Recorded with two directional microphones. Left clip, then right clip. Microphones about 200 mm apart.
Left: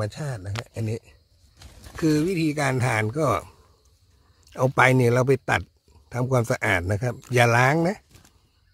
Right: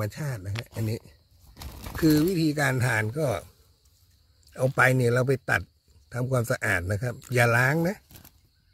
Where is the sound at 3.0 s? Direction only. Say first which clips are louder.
Left 5 dB; 35° left (ahead or behind).